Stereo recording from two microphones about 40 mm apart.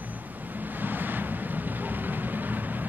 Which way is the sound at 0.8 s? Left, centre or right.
Right.